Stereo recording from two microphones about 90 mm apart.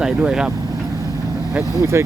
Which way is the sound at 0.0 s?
10° right (ahead or behind).